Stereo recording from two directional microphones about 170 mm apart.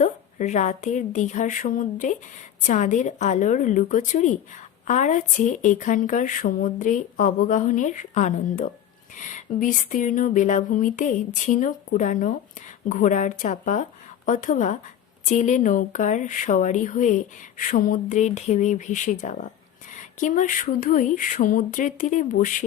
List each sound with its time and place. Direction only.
0.0 s speech: 45° left (ahead or behind)